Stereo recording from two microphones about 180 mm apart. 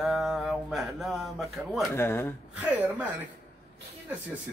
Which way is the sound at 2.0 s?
15° left (ahead or behind).